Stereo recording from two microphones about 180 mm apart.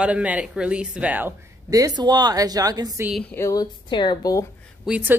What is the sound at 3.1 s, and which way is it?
Speech, 5° left (ahead or behind).